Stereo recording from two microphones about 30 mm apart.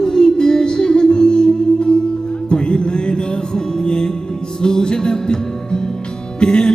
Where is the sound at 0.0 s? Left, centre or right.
Left.